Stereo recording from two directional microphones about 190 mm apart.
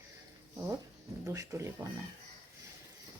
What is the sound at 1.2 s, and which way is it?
Speech, 15° right (ahead or behind).